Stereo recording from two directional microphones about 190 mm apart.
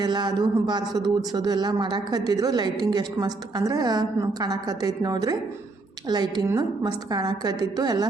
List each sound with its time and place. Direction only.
0.0 s speech: 20° right (ahead or behind)